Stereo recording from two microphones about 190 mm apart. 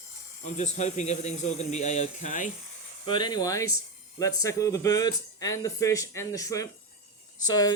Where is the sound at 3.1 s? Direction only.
25° left (ahead or behind).